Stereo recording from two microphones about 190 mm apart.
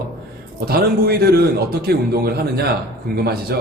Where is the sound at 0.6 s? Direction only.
55° right (ahead or behind).